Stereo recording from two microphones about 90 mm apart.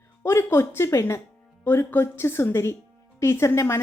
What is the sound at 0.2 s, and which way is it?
A woman's voice, 30° left (ahead or behind).